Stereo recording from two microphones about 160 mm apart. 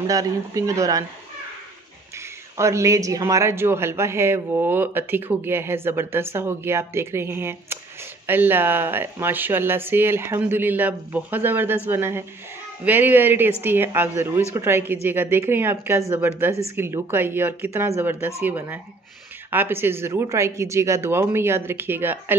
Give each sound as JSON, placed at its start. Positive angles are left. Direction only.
{"t": 0.0, "sound": "speech", "side_deg": -20}
{"t": 2.1, "sound": "speech", "side_deg": -15}